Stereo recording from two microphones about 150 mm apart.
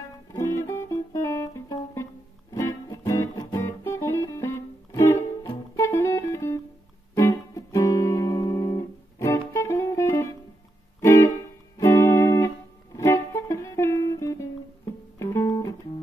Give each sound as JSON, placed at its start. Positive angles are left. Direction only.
{"t": 0.3, "sound": "music", "side_deg": 20}